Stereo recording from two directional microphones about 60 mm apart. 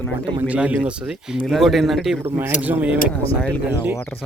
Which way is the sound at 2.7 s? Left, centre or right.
Right.